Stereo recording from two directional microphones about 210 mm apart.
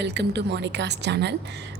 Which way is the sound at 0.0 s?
55° right (ahead or behind).